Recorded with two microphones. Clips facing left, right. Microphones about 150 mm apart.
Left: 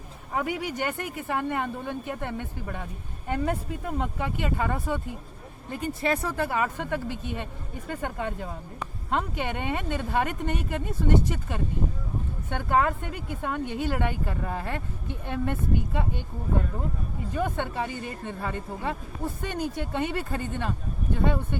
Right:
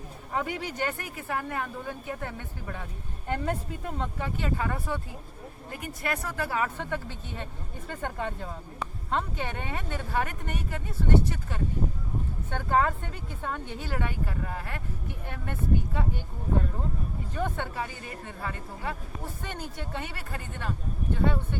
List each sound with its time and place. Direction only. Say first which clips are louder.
0.3 s speech: left 2 dB; 15° left (ahead or behind)
5.8 s speech: left 6 dB; 25° left (ahead or behind)
17.3 s speech: left 3 dB; 15° left (ahead or behind)